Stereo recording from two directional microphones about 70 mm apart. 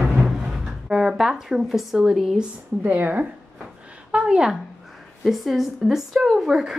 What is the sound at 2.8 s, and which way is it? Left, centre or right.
Speech, right.